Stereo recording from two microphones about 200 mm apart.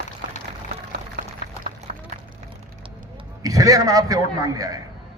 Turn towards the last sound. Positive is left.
turn(degrees=-15)  # may be behind; listen again after turning